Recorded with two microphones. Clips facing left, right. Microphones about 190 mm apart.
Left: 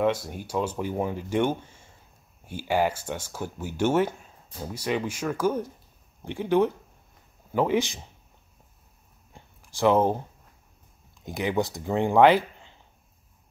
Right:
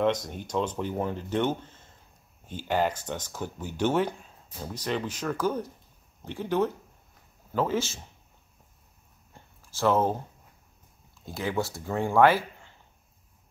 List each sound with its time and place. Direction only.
0.0 s speech: 10° left (ahead or behind)
9.3 s a sound: 15° left (ahead or behind)
11.1 s speech: 15° left (ahead or behind)